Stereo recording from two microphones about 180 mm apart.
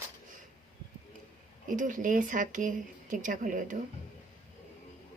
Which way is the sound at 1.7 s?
45° right (ahead or behind).